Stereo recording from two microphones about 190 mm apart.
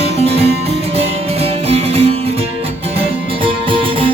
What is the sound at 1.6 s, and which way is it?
Music, 30° right (ahead or behind).